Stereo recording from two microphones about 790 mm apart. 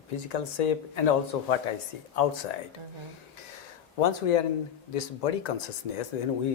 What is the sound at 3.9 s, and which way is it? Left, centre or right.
Speech, left.